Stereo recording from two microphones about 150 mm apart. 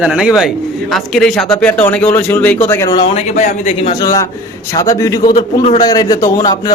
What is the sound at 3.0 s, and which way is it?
Speech, 45° left (ahead or behind).